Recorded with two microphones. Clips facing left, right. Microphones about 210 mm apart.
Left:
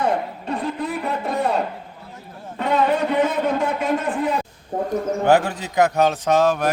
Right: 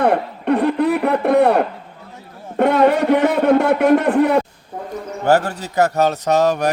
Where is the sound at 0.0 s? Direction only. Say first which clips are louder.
Right 5 dB; 65° right (ahead or behind).